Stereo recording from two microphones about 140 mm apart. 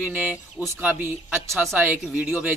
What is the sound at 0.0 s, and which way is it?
Speech, 10° right (ahead or behind).